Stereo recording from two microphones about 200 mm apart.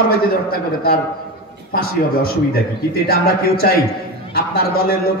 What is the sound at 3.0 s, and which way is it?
A man's voice, 50° left (ahead or behind).